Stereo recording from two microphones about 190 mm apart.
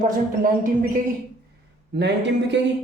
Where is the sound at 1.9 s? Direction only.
65° right (ahead or behind).